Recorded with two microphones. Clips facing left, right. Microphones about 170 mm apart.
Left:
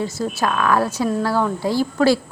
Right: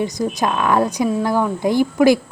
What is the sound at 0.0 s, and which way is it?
A woman's voice, 15° right (ahead or behind).